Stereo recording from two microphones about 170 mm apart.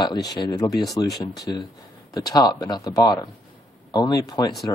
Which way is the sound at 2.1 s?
20° left (ahead or behind).